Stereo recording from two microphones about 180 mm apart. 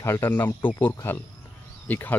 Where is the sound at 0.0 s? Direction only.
10° left (ahead or behind).